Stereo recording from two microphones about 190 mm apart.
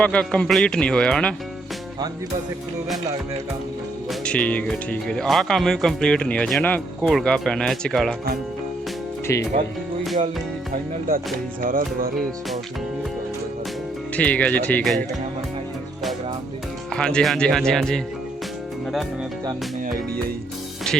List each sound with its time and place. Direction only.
0.0 s speech: 5° left (ahead or behind)
4.1 s speech: 5° left (ahead or behind)
9.2 s speech: 15° left (ahead or behind)
11.6 s music: 45° right (ahead or behind)
14.2 s speech: 5° left (ahead or behind)
16.9 s speech: 5° left (ahead or behind)
20.9 s music: 5° left (ahead or behind)